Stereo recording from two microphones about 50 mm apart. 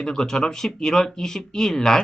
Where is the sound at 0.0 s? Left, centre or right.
Centre.